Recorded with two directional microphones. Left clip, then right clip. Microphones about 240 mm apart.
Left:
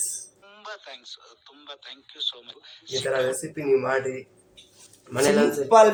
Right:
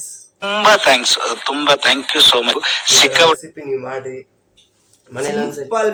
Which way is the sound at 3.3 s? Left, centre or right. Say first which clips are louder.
Left 1 dB; centre.